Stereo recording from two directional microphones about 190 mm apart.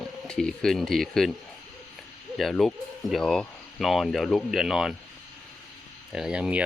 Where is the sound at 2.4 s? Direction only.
Centre (ahead or behind).